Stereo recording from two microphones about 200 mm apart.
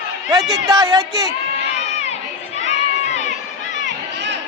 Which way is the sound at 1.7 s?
35° left (ahead or behind).